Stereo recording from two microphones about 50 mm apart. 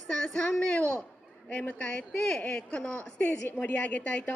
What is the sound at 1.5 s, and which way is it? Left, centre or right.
A woman's voice, left.